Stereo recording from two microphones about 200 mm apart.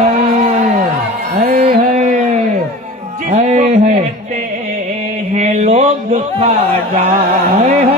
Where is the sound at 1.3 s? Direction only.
45° right (ahead or behind).